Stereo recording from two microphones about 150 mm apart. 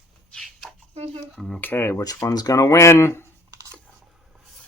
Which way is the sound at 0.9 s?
40° right (ahead or behind).